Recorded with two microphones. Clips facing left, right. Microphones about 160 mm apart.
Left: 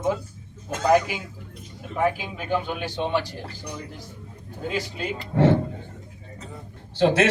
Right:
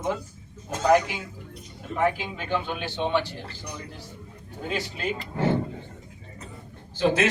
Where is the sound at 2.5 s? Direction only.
10° left (ahead or behind).